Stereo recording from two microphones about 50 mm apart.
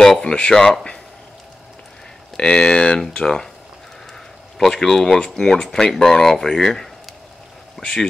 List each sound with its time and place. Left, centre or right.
0.2 s speech: centre
2.3 s speech: centre
4.6 s speech: centre